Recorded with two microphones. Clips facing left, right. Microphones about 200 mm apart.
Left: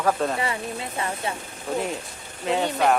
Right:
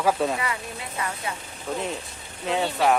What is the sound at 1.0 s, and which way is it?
Speech, 30° left (ahead or behind).